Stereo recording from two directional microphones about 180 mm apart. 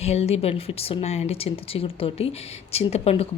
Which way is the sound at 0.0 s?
35° left (ahead or behind).